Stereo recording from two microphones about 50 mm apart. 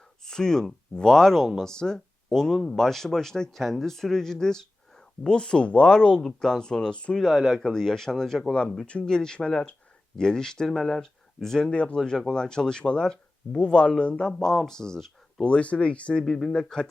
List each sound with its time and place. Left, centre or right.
0.3 s speech: centre
7.5 s speech: centre
11.7 s speech: left
15.4 s speech: left
16.2 s speech: centre